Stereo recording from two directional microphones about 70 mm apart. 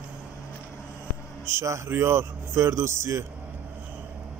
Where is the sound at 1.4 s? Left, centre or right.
Right.